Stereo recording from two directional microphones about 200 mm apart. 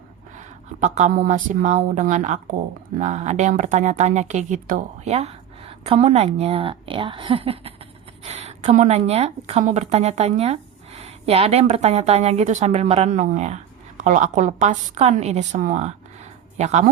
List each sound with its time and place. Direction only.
0.3 s a woman's voice: 35° right (ahead or behind)